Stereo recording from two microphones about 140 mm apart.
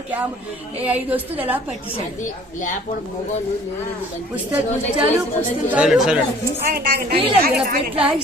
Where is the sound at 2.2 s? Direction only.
65° left (ahead or behind).